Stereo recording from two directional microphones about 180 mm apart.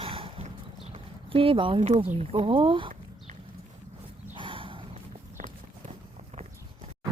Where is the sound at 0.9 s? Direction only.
30° right (ahead or behind).